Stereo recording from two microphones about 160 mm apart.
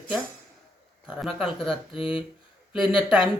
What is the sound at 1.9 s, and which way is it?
Speech, 35° left (ahead or behind).